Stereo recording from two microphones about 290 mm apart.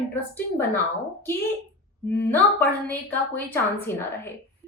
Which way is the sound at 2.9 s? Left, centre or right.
Centre.